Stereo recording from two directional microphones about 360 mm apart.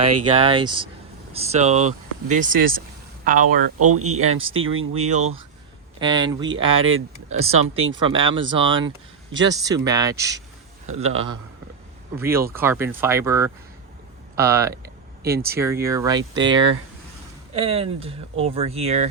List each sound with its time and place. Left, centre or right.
0.3 s speech: centre
3.8 s speech: right
6.0 s speech: centre
7.7 s speech: right
7.9 s speech: centre